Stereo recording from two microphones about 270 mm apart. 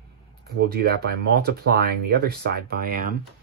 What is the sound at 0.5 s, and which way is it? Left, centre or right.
Speech, right.